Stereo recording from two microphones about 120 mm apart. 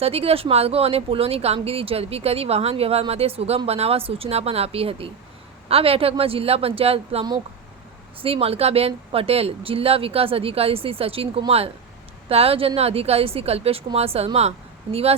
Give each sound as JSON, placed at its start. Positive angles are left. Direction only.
{"t": 0.0, "sound": "speech", "side_deg": -55}